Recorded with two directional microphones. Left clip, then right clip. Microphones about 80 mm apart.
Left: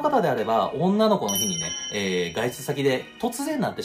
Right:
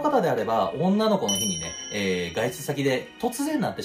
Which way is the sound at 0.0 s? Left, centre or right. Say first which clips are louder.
Left 1 dB; left.